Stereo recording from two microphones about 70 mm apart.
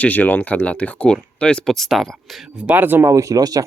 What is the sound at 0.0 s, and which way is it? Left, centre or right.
Speech, left.